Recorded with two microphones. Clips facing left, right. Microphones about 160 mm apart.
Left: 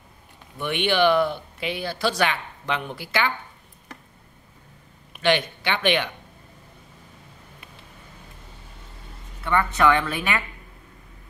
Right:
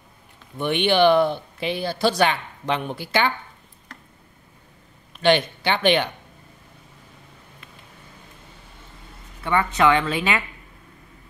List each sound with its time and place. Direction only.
0.6 s speech: 25° right (ahead or behind)
5.2 s speech: 30° right (ahead or behind)
9.4 s speech: 15° right (ahead or behind)